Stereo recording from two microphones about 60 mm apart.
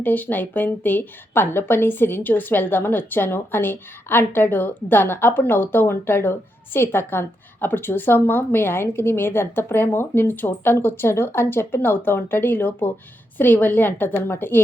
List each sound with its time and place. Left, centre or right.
0.0 s a woman's voice: left